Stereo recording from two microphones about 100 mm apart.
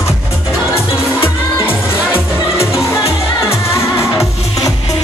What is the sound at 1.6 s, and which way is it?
Music, 25° left (ahead or behind).